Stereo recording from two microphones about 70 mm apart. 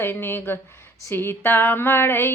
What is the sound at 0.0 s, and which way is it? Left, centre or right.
Female singing, left.